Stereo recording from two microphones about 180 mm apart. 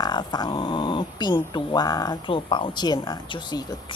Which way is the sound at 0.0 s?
25° left (ahead or behind).